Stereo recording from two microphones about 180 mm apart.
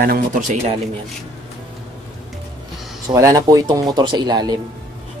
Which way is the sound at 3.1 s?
15° right (ahead or behind).